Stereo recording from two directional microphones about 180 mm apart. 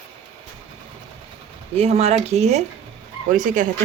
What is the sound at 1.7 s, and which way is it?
Speech, 35° right (ahead or behind).